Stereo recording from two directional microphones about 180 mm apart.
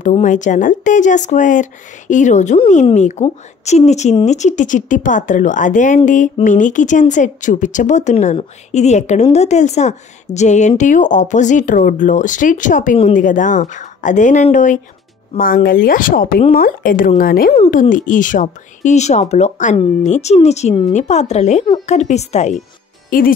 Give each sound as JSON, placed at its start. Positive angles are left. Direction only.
{"t": 0.0, "sound": "speech", "side_deg": 45}
{"t": 23.0, "sound": "speech", "side_deg": 50}